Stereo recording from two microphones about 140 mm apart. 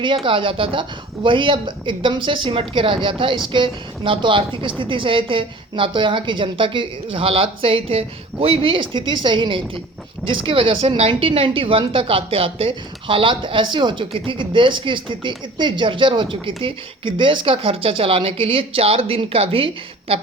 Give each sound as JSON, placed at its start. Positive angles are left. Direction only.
{"t": 0.3, "sound": "a woman's voice", "side_deg": -40}